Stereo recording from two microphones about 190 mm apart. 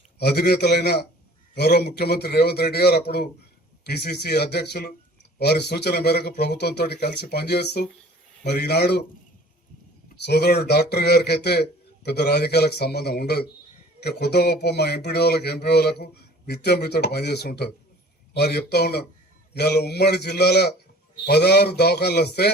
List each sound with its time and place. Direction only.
0.2 s speech: 55° left (ahead or behind)
10.2 s speech: 60° left (ahead or behind)